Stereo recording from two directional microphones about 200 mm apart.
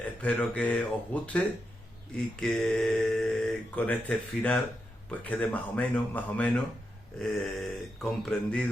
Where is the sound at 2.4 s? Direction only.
5° left (ahead or behind).